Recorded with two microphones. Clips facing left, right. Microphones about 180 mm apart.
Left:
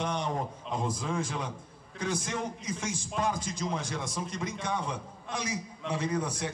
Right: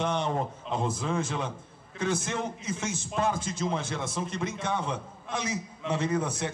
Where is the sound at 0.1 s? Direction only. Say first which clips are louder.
Right 3 dB; 25° right (ahead or behind).